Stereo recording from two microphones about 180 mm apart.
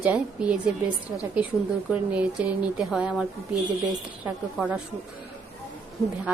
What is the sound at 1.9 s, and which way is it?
A woman's voice, 5° right (ahead or behind).